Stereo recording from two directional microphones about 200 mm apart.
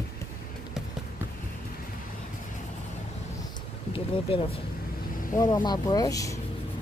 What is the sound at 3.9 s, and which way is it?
Speech, 25° left (ahead or behind).